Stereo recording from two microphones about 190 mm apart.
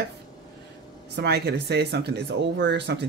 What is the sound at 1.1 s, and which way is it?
Speech, 60° right (ahead or behind).